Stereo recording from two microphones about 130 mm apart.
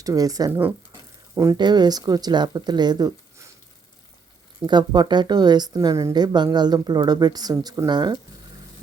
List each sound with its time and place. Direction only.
0.0 s a woman's voice: 25° right (ahead or behind)
4.6 s a woman's voice: 35° right (ahead or behind)